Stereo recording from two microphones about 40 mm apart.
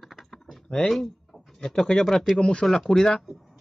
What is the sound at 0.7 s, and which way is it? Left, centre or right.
A man's voice, centre.